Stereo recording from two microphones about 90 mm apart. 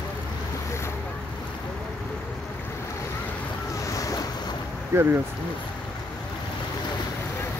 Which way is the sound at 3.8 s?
40° left (ahead or behind).